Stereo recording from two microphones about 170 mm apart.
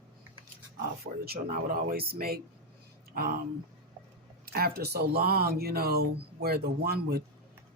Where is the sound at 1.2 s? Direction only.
60° right (ahead or behind).